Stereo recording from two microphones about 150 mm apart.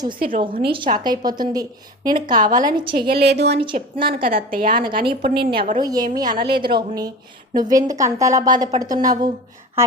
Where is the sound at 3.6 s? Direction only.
35° right (ahead or behind).